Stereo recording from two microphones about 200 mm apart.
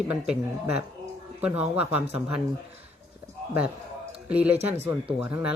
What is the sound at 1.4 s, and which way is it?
Speech, 5° right (ahead or behind).